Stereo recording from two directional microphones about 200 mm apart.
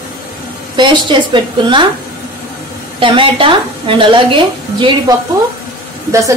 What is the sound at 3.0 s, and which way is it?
A woman's voice, 25° right (ahead or behind).